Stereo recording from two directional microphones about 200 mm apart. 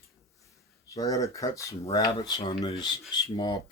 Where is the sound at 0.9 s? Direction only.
15° left (ahead or behind).